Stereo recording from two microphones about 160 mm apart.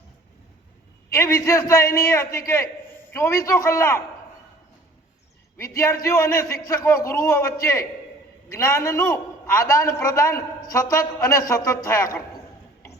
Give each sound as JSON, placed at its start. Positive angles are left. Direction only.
{"t": 1.1, "sound": "a man's voice", "side_deg": 15}
{"t": 5.5, "sound": "a man's voice", "side_deg": 15}